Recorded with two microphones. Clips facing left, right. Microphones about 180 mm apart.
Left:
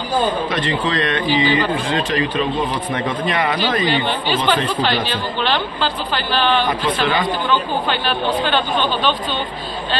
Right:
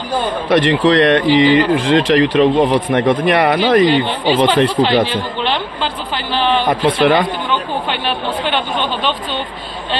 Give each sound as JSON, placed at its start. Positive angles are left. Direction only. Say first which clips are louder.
{"t": 0.5, "sound": "speech", "louder": "right 9 dB", "side_deg": -70}
{"t": 4.5, "sound": "speech", "louder": "right 5 dB", "side_deg": -25}
{"t": 6.7, "sound": "speech", "louder": "right 6 dB", "side_deg": -65}
{"t": 7.9, "sound": "speech", "louder": "left 1 dB", "side_deg": -20}